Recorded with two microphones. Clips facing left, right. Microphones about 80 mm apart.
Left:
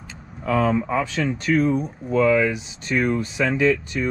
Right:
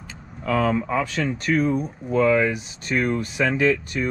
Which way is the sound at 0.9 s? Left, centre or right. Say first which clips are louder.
Left 1 dB; centre.